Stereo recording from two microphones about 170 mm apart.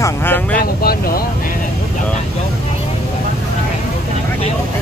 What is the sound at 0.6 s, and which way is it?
Speech, 60° left (ahead or behind).